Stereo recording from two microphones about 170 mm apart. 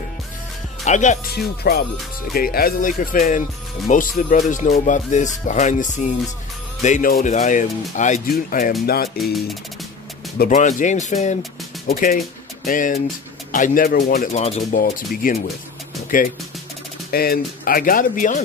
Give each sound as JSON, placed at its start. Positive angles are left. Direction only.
{"t": 0.8, "sound": "speech", "side_deg": 45}
{"t": 1.3, "sound": "speech", "side_deg": 65}
{"t": 8.8, "sound": "speech", "side_deg": 65}
{"t": 10.5, "sound": "speech", "side_deg": 45}
{"t": 11.9, "sound": "speech", "side_deg": 60}
{"t": 14.3, "sound": "speech", "side_deg": 40}
{"t": 14.7, "sound": "speech", "side_deg": 60}
{"t": 17.1, "sound": "speech", "side_deg": 65}